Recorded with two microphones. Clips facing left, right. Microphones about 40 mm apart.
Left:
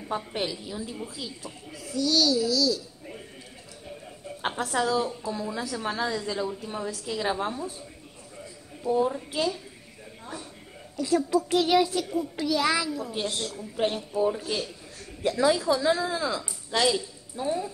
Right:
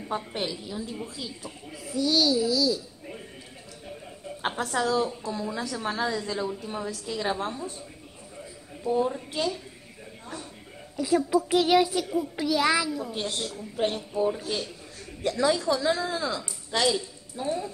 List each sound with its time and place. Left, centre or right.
0.1 s a child's voice: centre
2.0 s speech: centre
4.4 s a child's voice: centre
8.8 s a child's voice: centre
11.0 s a child's voice: centre